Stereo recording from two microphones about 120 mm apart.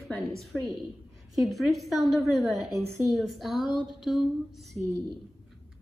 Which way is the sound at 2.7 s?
25° right (ahead or behind).